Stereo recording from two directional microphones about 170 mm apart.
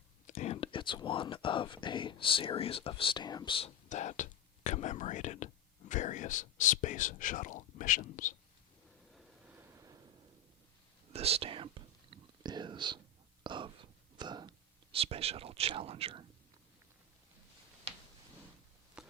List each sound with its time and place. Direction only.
0.3 s speech: 45° left (ahead or behind)
3.8 s speech: 45° left (ahead or behind)
9.1 s vehicle: 10° right (ahead or behind)
11.1 s whispering: 35° right (ahead or behind)
13.4 s a sound: 30° right (ahead or behind)
14.9 s speech: 35° right (ahead or behind)
19.0 s a sound: 5° right (ahead or behind)